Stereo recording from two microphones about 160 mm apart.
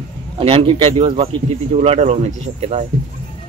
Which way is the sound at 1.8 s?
45° right (ahead or behind).